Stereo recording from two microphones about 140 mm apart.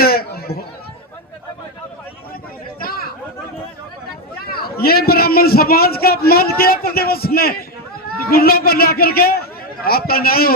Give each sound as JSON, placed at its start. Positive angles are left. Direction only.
{"t": 0.0, "sound": "chatter", "side_deg": 90}
{"t": 2.8, "sound": "chatter", "side_deg": 90}
{"t": 4.4, "sound": "a man's voice", "side_deg": 90}